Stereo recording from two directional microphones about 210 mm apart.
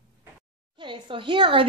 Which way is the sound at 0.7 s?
25° right (ahead or behind).